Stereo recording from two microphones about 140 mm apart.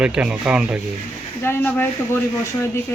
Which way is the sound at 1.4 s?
15° left (ahead or behind).